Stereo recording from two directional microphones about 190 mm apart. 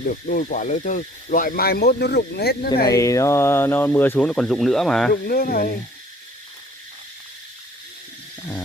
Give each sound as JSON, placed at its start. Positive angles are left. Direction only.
{"t": 0.0, "sound": "speech", "side_deg": 50}
{"t": 2.9, "sound": "speech", "side_deg": 15}
{"t": 5.1, "sound": "speech", "side_deg": 50}